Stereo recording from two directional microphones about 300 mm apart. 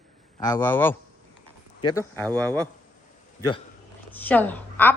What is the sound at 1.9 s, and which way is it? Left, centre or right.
Speech, centre.